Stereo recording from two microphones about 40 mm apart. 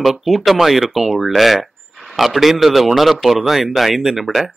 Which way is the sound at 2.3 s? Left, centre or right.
Centre.